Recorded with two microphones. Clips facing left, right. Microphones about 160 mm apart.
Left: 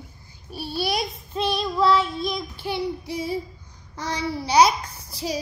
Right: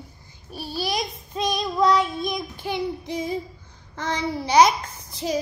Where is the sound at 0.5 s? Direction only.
40° right (ahead or behind).